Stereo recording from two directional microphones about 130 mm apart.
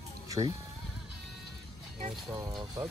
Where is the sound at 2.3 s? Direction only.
25° right (ahead or behind).